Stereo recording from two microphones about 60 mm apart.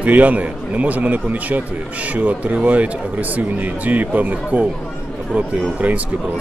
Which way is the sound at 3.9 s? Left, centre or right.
Right.